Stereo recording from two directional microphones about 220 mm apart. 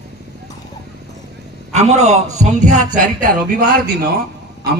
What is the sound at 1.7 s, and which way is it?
A man's voice, 30° right (ahead or behind).